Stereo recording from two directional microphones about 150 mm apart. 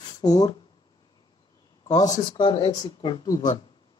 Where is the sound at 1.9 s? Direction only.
25° left (ahead or behind).